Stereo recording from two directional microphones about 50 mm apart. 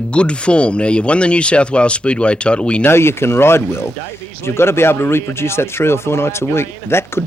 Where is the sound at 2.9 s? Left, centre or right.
Left.